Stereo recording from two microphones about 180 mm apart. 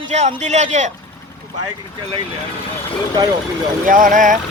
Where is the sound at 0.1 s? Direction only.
40° right (ahead or behind).